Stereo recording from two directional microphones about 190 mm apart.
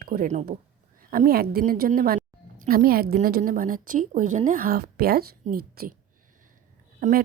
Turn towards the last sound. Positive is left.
turn(degrees=-45)  # may be behind; listen again after turning